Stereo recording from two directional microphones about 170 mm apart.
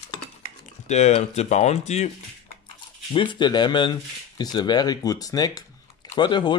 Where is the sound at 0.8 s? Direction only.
40° left (ahead or behind).